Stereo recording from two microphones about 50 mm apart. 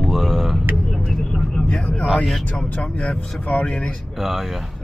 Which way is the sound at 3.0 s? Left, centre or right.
Left.